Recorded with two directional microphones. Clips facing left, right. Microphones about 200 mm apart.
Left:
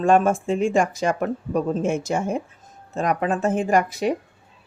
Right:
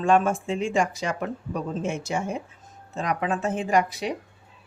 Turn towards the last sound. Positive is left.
turn(degrees=45)  # may be behind; listen again after turning